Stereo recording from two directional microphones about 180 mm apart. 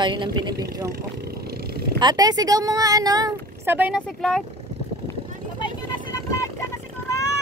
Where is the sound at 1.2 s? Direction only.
60° right (ahead or behind).